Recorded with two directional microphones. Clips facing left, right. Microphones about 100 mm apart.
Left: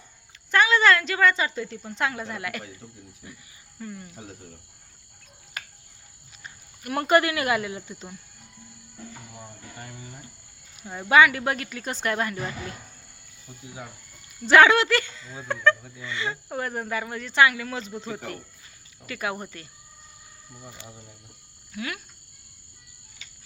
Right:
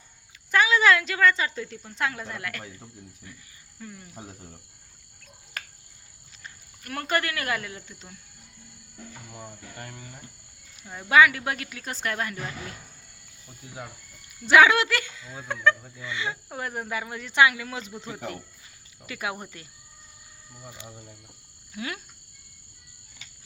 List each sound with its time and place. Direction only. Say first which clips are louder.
0.5 s speech: left 1 dB; 5° right (ahead or behind)
3.3 s cricket: left 4 dB; 10° left (ahead or behind)
3.8 s speech: left 5 dB; centre (ahead or behind)
6.4 s speech: left 5 dB; 15° left (ahead or behind)
9.3 s speech: right 1 dB; centre (ahead or behind)
14.4 s speech: left 1 dB; 5° right (ahead or behind)
15.4 s speech: left 3 dB; centre (ahead or behind)
16.0 s speech: left 1 dB; 10° right (ahead or behind)
19.0 s speech: left 2 dB; 10° right (ahead or behind)
20.7 s speech: right 1 dB; 10° right (ahead or behind)
21.7 s speech: left 1 dB; 25° right (ahead or behind)